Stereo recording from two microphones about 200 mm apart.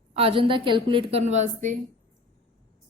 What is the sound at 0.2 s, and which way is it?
A woman's voice, 25° right (ahead or behind).